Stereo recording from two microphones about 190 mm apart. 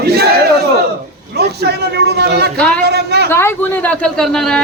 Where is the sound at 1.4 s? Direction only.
60° right (ahead or behind).